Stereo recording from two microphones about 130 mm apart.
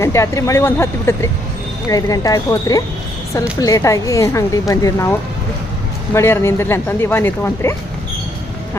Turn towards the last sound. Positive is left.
turn(degrees=15)  # may be behind; listen again after turning